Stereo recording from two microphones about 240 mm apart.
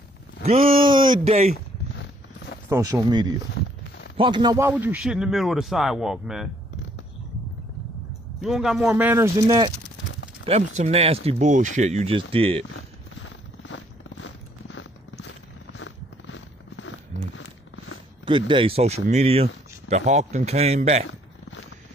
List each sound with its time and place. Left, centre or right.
0.4 s speech: right
2.7 s a man's voice: centre
8.4 s a man's voice: centre
10.4 s speech: right
13.7 s a sound: left
18.5 s speech: right